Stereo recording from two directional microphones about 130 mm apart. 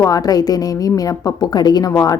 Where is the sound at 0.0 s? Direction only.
30° left (ahead or behind).